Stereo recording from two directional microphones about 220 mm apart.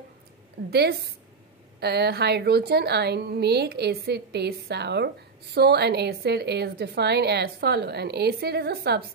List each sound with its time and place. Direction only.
0.7 s a woman's voice: 45° right (ahead or behind)